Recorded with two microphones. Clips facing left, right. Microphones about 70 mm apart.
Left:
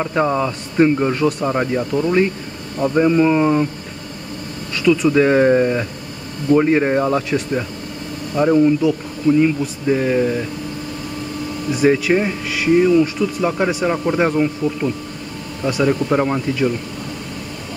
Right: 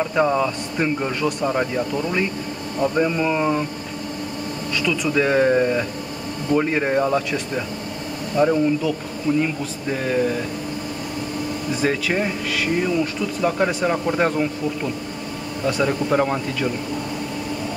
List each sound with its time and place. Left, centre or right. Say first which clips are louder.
0.0 s speech: left 1 dB; centre
5.1 s speech: even; centre
11.7 s speech: left 7 dB; centre